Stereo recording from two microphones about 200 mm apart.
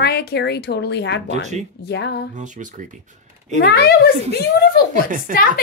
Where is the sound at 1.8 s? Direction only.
55° left (ahead or behind).